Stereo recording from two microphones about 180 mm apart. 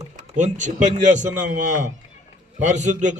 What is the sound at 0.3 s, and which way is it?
A man's voice, 40° right (ahead or behind).